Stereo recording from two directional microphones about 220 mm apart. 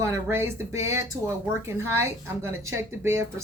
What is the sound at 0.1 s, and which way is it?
A woman's voice, 10° right (ahead or behind).